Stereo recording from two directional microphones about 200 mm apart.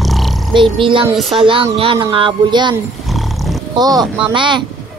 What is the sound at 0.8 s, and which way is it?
Wind chime, 25° right (ahead or behind).